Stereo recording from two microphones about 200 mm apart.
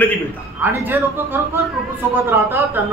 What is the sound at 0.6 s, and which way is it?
A man's voice, 10° right (ahead or behind).